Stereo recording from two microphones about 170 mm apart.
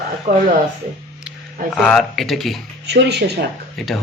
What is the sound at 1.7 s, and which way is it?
Speech, centre (ahead or behind).